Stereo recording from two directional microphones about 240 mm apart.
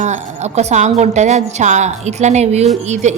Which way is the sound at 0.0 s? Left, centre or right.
Right.